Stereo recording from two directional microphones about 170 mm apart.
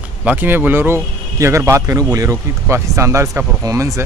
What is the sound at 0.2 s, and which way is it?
Speech, 10° right (ahead or behind).